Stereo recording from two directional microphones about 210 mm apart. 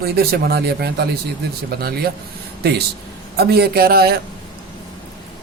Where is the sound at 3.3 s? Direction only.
50° right (ahead or behind).